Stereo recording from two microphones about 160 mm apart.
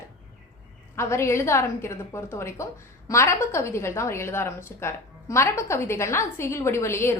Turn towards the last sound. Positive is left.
turn(degrees=15)  # may be behind; listen again after turning